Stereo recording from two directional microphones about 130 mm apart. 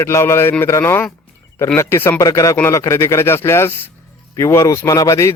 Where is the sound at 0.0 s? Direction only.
20° left (ahead or behind).